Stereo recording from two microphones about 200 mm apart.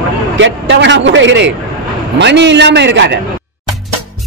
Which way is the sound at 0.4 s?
65° right (ahead or behind).